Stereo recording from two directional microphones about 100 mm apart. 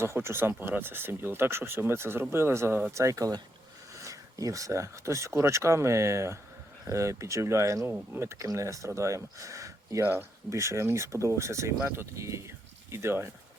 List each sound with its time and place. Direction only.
0.0 s speech: 25° right (ahead or behind)